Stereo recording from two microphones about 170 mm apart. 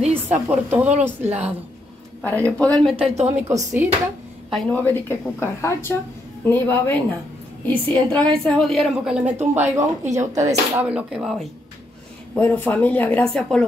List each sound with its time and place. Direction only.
0.3 s a woman's voice: 10° right (ahead or behind)
2.2 s a woman's voice: 10° left (ahead or behind)
3.0 s a woman's voice: 40° right (ahead or behind)
4.5 s a woman's voice: 5° left (ahead or behind); by 9.8 s 15° right (ahead or behind)
9.8 s speech: 45° right (ahead or behind)
10.3 s speech: 20° right (ahead or behind)
10.9 s a woman's voice: 5° right (ahead or behind)
12.4 s a woman's voice: 10° left (ahead or behind)